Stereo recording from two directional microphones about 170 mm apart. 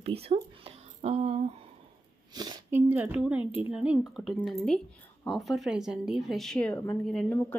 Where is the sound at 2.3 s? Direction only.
25° right (ahead or behind); by 7.3 s centre (ahead or behind).